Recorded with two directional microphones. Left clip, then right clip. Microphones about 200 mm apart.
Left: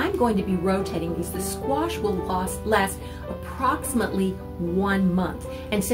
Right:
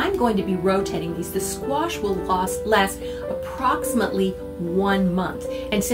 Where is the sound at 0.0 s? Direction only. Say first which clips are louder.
Right 2 dB; 5° left (ahead or behind).